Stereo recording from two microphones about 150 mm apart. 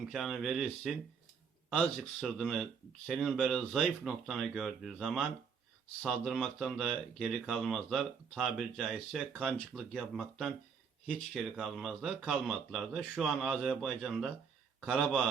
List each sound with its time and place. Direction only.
0.1 s speech: centre (ahead or behind)